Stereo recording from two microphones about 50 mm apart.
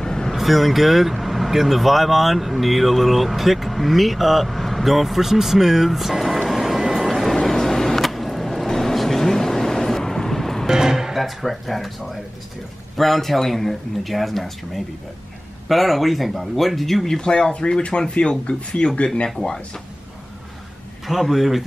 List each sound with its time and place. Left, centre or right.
0.0 s vehicle: centre
0.4 s speech: centre
7.3 s vehicle: centre
10.7 s speech: centre
15.7 s speech: centre
21.1 s speech: centre